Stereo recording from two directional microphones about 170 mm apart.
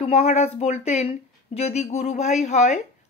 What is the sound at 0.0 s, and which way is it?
Speech, 40° left (ahead or behind).